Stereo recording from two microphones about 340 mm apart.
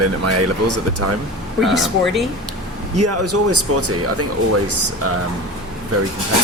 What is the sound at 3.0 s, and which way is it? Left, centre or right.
Speech, right.